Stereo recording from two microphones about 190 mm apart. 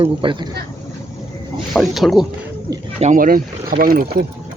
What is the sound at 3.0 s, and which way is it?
Speech, 45° right (ahead or behind).